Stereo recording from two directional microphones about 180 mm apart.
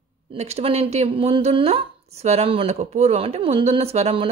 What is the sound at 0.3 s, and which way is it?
Speech, 35° right (ahead or behind).